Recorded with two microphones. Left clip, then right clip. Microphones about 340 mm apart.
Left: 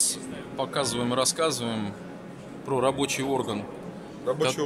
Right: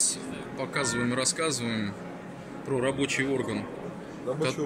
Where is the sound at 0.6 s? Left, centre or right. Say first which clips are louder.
Left 2 dB; centre.